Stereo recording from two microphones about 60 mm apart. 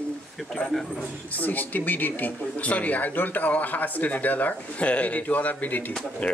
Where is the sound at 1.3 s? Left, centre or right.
Left.